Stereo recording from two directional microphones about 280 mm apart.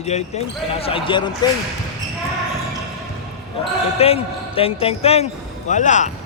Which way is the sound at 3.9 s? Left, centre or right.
Left.